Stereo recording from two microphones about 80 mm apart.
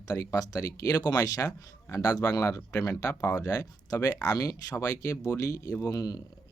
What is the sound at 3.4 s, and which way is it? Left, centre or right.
Speech, left.